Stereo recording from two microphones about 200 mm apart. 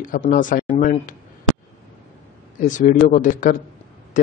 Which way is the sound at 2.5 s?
40° left (ahead or behind).